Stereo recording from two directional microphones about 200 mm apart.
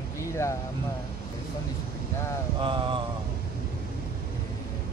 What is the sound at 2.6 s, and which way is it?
Speech, 25° right (ahead or behind).